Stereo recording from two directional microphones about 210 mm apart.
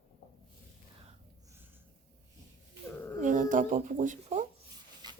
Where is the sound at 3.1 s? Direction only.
40° right (ahead or behind).